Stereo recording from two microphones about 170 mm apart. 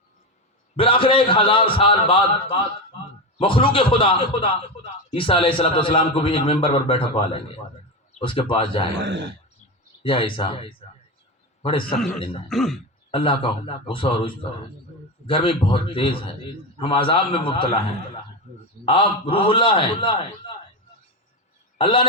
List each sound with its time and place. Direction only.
0.8 s speech: 30° left (ahead or behind)
9.0 s speech: 90° right
10.0 s speech: 30° left (ahead or behind)
11.9 s speech: centre (ahead or behind)
13.1 s speech: 30° left (ahead or behind)
18.9 s speech: 30° left (ahead or behind)
21.8 s a man's voice: 30° left (ahead or behind)